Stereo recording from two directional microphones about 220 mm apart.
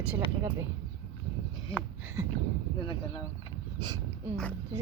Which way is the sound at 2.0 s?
10° right (ahead or behind).